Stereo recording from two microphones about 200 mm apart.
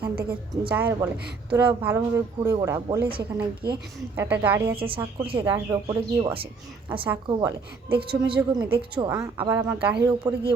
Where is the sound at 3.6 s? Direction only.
55° right (ahead or behind).